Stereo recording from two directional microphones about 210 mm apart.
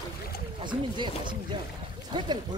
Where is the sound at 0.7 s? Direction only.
20° right (ahead or behind).